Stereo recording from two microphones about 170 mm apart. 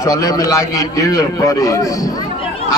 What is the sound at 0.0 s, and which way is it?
A man's voice, 20° left (ahead or behind).